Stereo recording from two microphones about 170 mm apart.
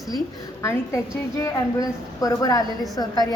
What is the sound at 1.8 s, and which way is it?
Speech, 20° left (ahead or behind).